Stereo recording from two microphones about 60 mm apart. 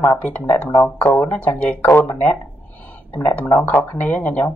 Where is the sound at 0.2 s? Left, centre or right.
Left.